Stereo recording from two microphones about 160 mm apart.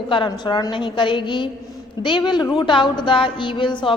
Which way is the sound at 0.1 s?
30° left (ahead or behind).